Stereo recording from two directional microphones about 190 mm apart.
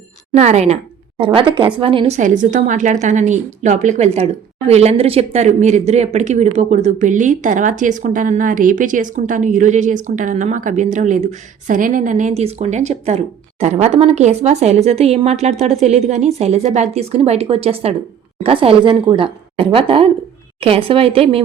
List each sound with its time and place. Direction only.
0.3 s a woman's voice: 35° right (ahead or behind)